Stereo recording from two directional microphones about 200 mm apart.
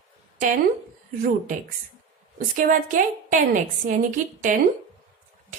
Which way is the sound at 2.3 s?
45° right (ahead or behind).